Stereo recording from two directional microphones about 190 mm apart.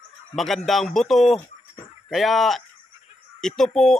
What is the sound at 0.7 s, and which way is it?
A man's voice, centre (ahead or behind).